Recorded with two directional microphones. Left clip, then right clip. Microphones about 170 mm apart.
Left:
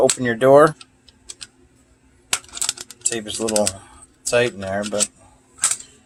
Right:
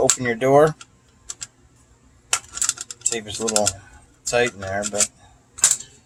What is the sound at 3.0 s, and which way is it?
Speech, 40° left (ahead or behind).